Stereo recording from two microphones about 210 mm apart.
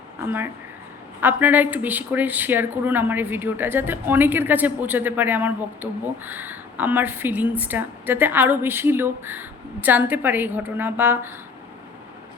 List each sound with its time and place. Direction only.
0.3 s speech: 10° right (ahead or behind)